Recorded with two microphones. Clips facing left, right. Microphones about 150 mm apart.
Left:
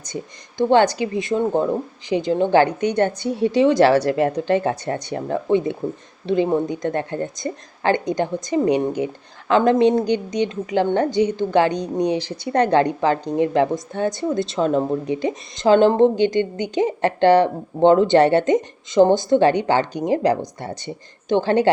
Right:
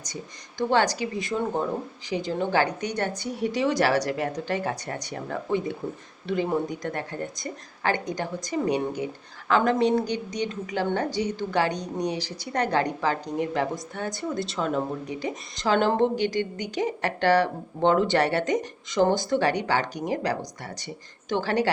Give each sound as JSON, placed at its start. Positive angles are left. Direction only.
{"t": 0.7, "sound": "speech", "side_deg": 25}